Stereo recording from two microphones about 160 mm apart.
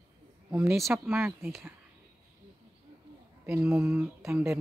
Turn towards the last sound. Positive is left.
turn(degrees=-15)  # may be behind; listen again after turning